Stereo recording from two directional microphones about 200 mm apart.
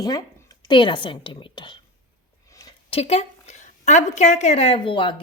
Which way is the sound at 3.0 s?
30° left (ahead or behind).